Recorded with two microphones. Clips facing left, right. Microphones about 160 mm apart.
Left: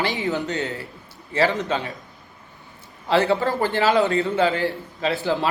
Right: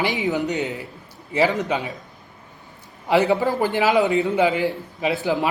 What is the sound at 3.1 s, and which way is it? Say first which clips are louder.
A man's voice: right 1 dB; 15° right (ahead or behind).